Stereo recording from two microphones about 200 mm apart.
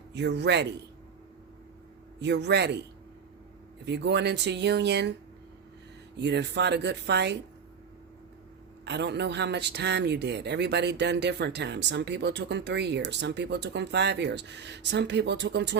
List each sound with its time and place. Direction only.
0.1 s speech: 55° right (ahead or behind)
2.2 s speech: 60° right (ahead or behind)
3.8 s speech: 60° right (ahead or behind)
6.1 s speech: 60° right (ahead or behind)
8.8 s speech: 60° right (ahead or behind)